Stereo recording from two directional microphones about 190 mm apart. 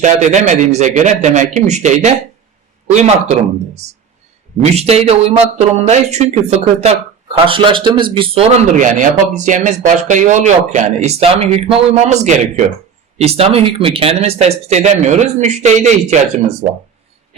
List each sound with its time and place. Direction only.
0.0 s speech: 40° right (ahead or behind)
8.8 s speech: 40° right (ahead or behind)